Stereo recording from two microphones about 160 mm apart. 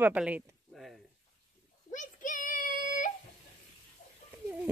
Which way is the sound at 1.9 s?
50° left (ahead or behind).